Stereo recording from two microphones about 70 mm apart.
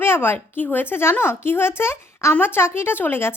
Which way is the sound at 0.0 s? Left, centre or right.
Left.